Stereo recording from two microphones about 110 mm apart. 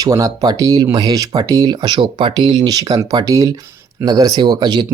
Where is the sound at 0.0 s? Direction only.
30° right (ahead or behind).